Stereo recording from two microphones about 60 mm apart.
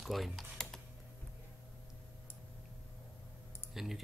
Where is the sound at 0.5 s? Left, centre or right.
Centre.